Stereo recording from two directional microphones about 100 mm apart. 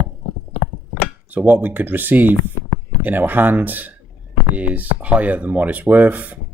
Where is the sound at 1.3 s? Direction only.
15° right (ahead or behind).